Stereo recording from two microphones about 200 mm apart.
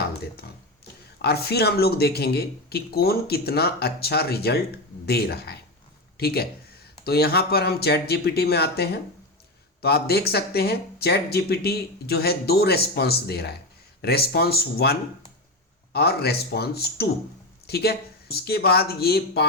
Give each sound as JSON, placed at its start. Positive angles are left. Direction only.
{"t": 1.2, "sound": "speech", "side_deg": 55}